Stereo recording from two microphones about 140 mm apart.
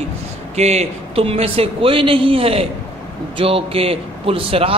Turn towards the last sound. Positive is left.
turn(degrees=-40)  # may be behind; listen again after turning